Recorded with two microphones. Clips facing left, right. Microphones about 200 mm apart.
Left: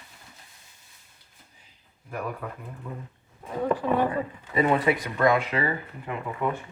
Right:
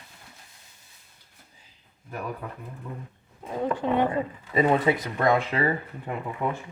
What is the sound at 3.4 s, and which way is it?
Speech, 20° right (ahead or behind).